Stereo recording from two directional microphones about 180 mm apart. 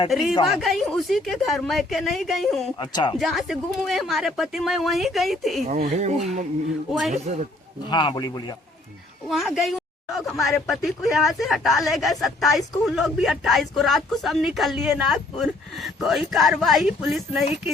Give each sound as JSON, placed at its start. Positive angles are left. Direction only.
{"t": 0.1, "sound": "speech", "side_deg": 0}
{"t": 2.7, "sound": "a man's voice", "side_deg": 25}
{"t": 3.2, "sound": "speech", "side_deg": 0}
{"t": 5.6, "sound": "speech", "side_deg": -45}
{"t": 7.9, "sound": "a man's voice", "side_deg": 25}
{"t": 9.2, "sound": "speech", "side_deg": 0}